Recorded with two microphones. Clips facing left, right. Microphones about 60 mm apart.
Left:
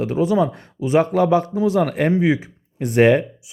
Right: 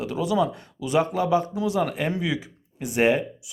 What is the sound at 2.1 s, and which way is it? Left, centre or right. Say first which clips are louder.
A man's voice: left 9 dB; left.